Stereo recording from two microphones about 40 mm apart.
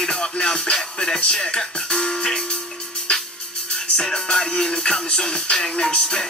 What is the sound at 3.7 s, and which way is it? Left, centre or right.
Speech, centre.